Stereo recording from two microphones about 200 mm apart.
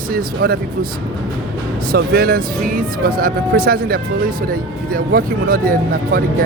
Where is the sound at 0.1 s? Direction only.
45° right (ahead or behind).